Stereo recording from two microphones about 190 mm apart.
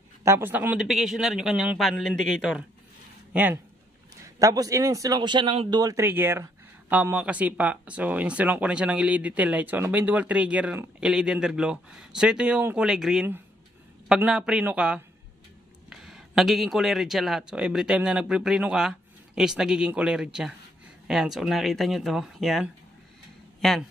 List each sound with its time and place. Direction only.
0.2 s speech: 10° right (ahead or behind)
4.4 s a man's voice: 20° right (ahead or behind); by 22.7 s centre (ahead or behind)